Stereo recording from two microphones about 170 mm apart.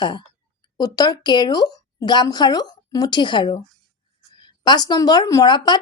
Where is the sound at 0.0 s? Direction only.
25° left (ahead or behind).